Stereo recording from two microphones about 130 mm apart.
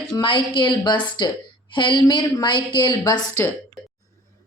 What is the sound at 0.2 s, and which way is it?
A woman's voice, 40° left (ahead or behind).